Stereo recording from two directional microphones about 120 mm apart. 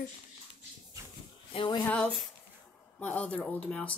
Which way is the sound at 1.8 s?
10° left (ahead or behind).